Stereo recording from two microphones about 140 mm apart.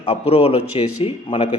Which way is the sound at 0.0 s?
45° left (ahead or behind).